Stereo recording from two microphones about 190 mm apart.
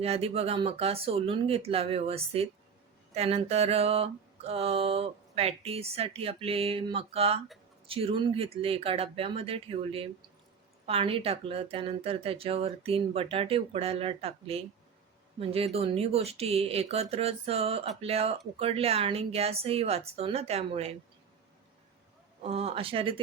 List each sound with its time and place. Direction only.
0.0 s mantra: 30° right (ahead or behind)
7.9 s speech: 30° right (ahead or behind)
10.8 s mantra: 30° right (ahead or behind)
22.4 s speech: 30° right (ahead or behind)